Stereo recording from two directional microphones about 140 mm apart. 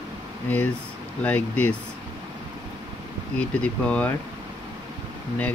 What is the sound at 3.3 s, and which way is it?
Speech, 10° left (ahead or behind).